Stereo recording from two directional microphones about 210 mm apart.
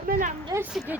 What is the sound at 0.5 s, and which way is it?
Speech, 15° right (ahead or behind).